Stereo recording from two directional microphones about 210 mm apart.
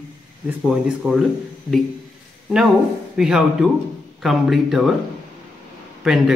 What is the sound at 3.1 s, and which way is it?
Speech, 5° right (ahead or behind).